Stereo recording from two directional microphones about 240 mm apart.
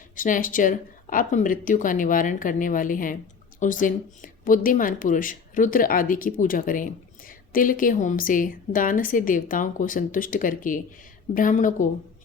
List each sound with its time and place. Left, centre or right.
0.2 s speech: left